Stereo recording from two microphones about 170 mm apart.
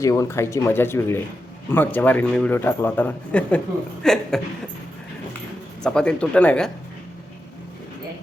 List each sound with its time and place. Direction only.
0.0 s speech: 20° left (ahead or behind); by 4.4 s 5° left (ahead or behind)
5.8 s speech: 5° left (ahead or behind)